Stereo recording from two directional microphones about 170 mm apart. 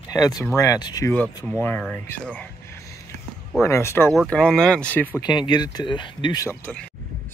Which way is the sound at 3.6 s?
15° left (ahead or behind).